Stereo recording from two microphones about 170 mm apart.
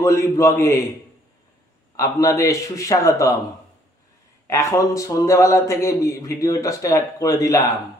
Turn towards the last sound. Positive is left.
turn(degrees=20)  # may be behind; listen again after turning